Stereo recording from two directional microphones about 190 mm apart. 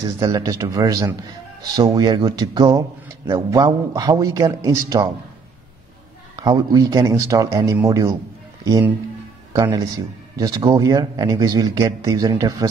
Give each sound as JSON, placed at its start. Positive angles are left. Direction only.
{"t": 0.2, "sound": "a man's voice", "side_deg": -20}
{"t": 6.3, "sound": "a man's voice", "side_deg": -20}